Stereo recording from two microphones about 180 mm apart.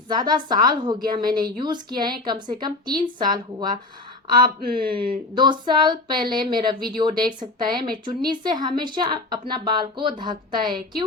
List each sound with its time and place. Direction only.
0.1 s a woman's voice: 25° right (ahead or behind)
4.4 s speech: 55° right (ahead or behind)
5.3 s a woman's voice: 25° right (ahead or behind)